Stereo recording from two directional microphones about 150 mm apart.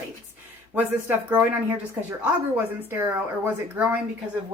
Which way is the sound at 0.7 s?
10° right (ahead or behind).